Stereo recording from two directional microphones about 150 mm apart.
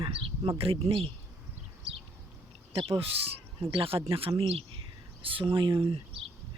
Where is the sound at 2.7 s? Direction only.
35° right (ahead or behind).